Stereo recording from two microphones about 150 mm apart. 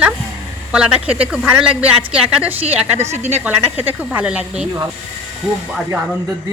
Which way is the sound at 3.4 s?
10° right (ahead or behind).